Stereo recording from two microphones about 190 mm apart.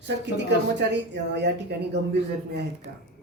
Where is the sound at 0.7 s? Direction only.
65° right (ahead or behind).